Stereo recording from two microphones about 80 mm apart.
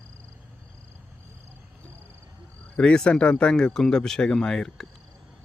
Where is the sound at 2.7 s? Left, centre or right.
Centre.